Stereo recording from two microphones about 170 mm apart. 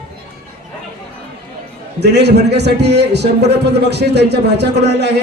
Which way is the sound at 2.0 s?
80° right.